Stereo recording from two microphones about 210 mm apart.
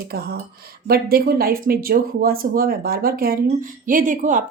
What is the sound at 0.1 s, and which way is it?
Speech, 45° right (ahead or behind).